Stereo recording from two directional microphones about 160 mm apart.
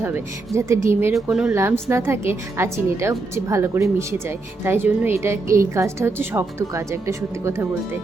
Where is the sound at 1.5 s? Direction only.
15° right (ahead or behind).